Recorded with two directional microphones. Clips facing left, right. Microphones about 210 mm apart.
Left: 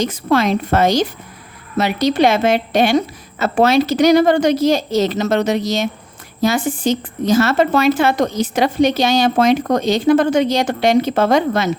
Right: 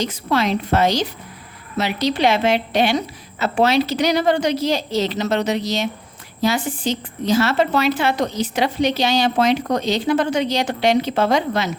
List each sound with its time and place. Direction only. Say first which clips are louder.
0.0 s a woman's voice: left 4 dB; 50° left (ahead or behind)